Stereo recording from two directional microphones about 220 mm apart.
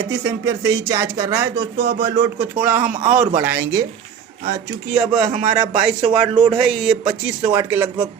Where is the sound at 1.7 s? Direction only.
45° right (ahead or behind).